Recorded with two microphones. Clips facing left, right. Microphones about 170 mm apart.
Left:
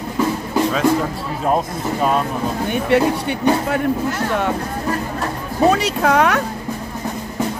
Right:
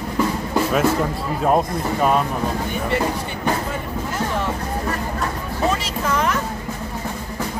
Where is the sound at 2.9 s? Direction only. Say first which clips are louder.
Left 7 dB; 70° left (ahead or behind).